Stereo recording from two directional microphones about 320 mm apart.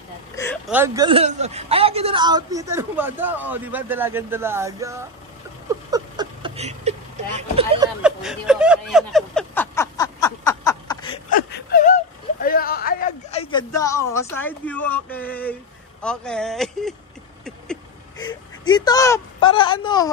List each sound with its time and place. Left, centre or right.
0.7 s a man's voice: centre
5.7 s vehicle: centre
8.0 s a sound: centre
11.2 s whimper: left; by 15.5 s centre
16.0 s speech: centre
18.2 s speech: centre